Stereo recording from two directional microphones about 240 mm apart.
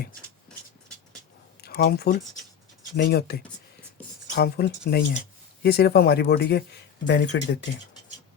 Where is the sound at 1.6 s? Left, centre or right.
Left.